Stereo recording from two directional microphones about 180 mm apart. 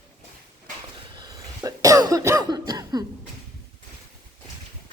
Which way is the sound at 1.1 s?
20° right (ahead or behind).